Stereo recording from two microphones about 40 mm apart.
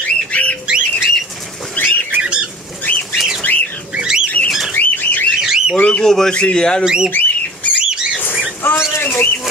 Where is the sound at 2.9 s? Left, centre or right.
Left.